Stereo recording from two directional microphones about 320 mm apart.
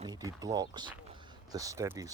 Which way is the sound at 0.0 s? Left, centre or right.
Centre.